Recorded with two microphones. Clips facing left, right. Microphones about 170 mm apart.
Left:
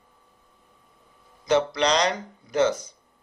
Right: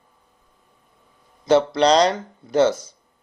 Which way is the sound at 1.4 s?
30° right (ahead or behind).